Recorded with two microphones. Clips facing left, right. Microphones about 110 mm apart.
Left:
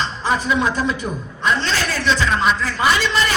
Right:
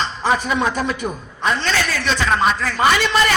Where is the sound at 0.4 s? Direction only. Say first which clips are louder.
Left 1 dB; 55° right (ahead or behind).